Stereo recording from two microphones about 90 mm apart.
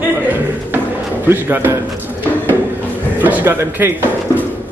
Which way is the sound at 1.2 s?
25° right (ahead or behind).